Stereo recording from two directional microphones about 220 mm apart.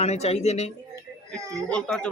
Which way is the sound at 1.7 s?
5° left (ahead or behind).